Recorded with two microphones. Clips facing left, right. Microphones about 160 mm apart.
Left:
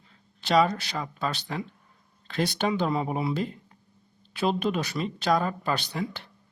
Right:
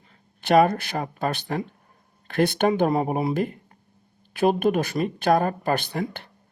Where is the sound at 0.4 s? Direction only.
55° right (ahead or behind).